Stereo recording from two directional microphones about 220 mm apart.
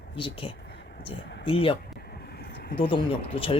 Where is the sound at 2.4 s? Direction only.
45° left (ahead or behind).